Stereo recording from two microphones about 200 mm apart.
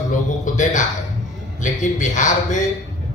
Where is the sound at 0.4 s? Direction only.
40° left (ahead or behind).